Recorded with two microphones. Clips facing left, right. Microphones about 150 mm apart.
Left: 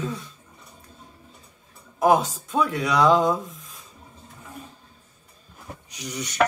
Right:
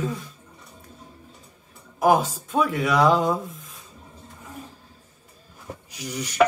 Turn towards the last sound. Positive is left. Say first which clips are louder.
# right 1 dB
turn(degrees=-5)  # may be behind; listen again after turning